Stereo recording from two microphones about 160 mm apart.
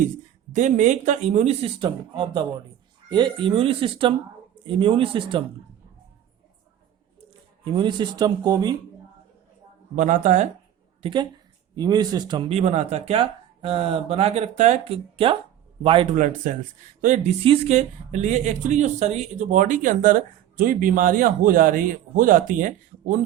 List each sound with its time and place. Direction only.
0.5 s speech: 50° right (ahead or behind); by 5.4 s 30° right (ahead or behind)
7.6 s speech: 30° right (ahead or behind)
9.9 s speech: 50° right (ahead or behind)
11.0 s speech: 30° right (ahead or behind)
12.5 s speech: 40° right (ahead or behind)
16.1 s speech: 55° right (ahead or behind)
17.4 s speech: 35° right (ahead or behind); by 23.2 s 55° right (ahead or behind)